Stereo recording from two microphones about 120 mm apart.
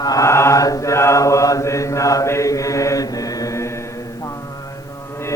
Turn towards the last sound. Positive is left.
turn(degrees=25)  # may be behind; listen again after turning